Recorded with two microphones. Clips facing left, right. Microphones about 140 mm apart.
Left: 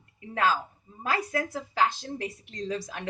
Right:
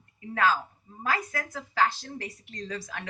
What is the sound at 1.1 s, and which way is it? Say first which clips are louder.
Speech: left 2 dB; 25° left (ahead or behind).